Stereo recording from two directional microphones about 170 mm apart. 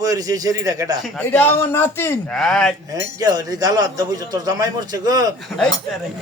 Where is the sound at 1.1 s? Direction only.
10° left (ahead or behind).